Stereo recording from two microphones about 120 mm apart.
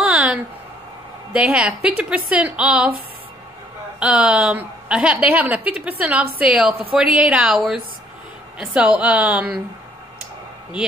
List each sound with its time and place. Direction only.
0.0 s a sound: 10° right (ahead or behind)
1.3 s a woman's voice: 10° right (ahead or behind)
4.0 s a woman's voice: 5° right (ahead or behind)